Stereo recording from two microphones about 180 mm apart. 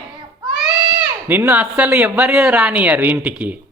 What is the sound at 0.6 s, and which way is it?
Speech, 5° right (ahead or behind).